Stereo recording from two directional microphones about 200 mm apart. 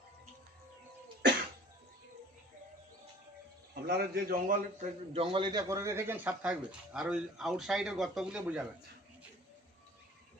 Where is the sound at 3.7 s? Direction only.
55° right (ahead or behind).